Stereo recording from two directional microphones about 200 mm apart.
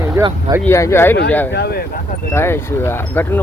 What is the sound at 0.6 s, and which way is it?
Speech, 15° left (ahead or behind).